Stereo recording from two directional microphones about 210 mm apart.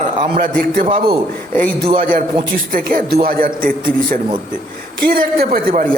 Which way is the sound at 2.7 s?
40° right (ahead or behind).